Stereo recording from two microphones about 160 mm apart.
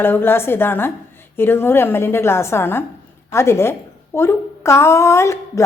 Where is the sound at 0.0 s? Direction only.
15° left (ahead or behind).